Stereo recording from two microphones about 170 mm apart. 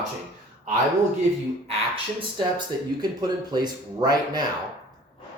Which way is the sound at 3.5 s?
25° right (ahead or behind).